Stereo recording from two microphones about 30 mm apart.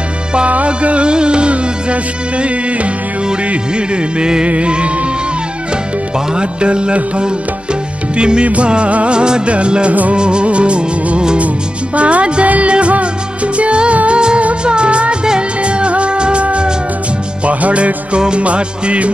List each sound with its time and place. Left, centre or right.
0.7 s music: right
3.7 s music of bollywood: right
6.3 s music of bollywood: right
9.1 s music: right
9.5 s music of bollywood: right
11.3 s music: right
15.6 s music of bollywood: right
17.5 s music: right